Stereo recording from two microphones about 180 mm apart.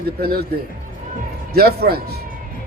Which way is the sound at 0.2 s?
60° right (ahead or behind).